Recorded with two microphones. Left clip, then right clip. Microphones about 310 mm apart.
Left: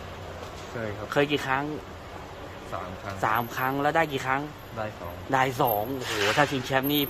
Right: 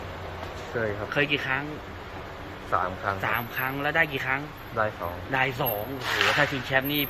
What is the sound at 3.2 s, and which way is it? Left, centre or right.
A man's voice, left.